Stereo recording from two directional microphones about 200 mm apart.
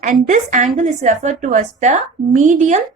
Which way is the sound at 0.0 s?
35° right (ahead or behind).